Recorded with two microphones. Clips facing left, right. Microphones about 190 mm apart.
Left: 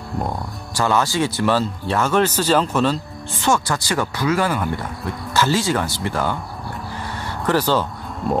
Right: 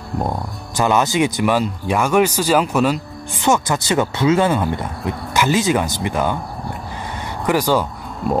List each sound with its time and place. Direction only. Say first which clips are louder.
0.7 s speech: right 3 dB; 20° right (ahead or behind)
7.4 s speech: right 2 dB; 10° right (ahead or behind)